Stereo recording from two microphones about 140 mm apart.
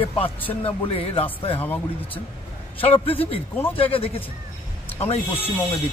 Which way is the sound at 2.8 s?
45° left (ahead or behind).